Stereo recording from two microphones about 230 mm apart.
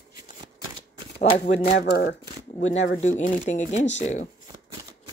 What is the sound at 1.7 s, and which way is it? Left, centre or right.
Speech, left.